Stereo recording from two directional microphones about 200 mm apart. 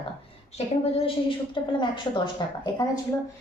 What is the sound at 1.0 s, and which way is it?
A woman's voice, 25° left (ahead or behind).